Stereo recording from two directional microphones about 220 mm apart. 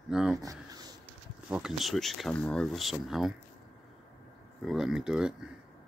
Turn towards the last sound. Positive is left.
turn(degrees=-5)  # may be behind; listen again after turning